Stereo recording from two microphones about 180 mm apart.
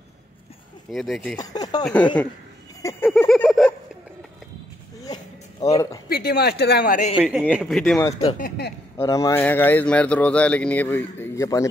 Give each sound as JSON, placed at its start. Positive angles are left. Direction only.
{"t": 0.9, "sound": "speech", "side_deg": 0}
{"t": 1.4, "sound": "speech", "side_deg": 20}
{"t": 2.8, "sound": "a sound", "side_deg": 15}
{"t": 5.0, "sound": "a sound", "side_deg": 20}
{"t": 6.0, "sound": "speech", "side_deg": 60}
{"t": 7.2, "sound": "speech", "side_deg": -5}
{"t": 8.4, "sound": "speech", "side_deg": 60}
{"t": 8.9, "sound": "speech", "side_deg": 15}